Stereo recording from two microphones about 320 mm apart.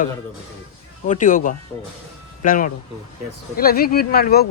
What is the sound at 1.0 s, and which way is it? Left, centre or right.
Speech, left.